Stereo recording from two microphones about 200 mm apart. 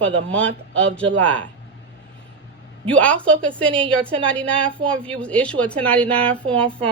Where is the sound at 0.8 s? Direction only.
5° left (ahead or behind).